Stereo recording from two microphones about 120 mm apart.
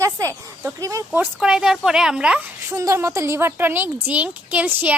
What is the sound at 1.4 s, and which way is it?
A woman's voice, 5° right (ahead or behind).